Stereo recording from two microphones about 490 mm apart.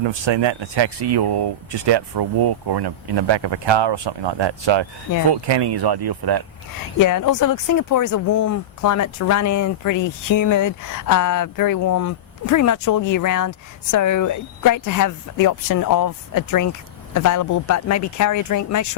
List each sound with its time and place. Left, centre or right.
0.0 s speech: right
7.0 s speech: left